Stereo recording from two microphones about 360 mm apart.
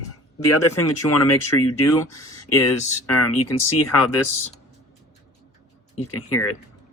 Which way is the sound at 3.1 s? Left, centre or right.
Left.